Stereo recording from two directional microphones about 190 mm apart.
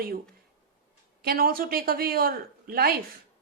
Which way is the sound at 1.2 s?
50° right (ahead or behind).